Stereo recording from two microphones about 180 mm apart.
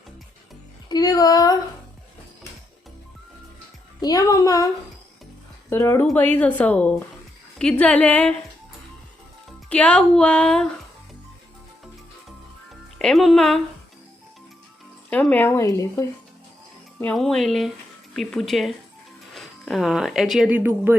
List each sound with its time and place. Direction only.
0.9 s a sound: 20° left (ahead or behind)
4.0 s speech: 20° left (ahead or behind)
5.7 s speech: 15° left (ahead or behind)
9.5 s speech: 5° left (ahead or behind)
13.0 s speech: centre (ahead or behind)
15.1 s speech: 5° left (ahead or behind)
17.0 s speech: 5° left (ahead or behind); by 20.9 s 10° right (ahead or behind)